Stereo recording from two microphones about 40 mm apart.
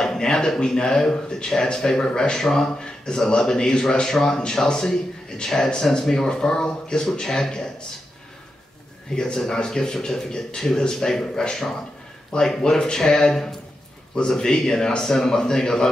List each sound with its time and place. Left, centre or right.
0.0 s speech: centre
9.1 s speech: centre